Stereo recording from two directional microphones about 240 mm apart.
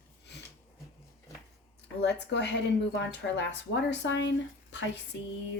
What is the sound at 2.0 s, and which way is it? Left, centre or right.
Speech, left.